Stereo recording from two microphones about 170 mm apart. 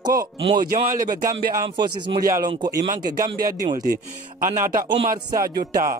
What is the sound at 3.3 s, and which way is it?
Speech, 55° right (ahead or behind).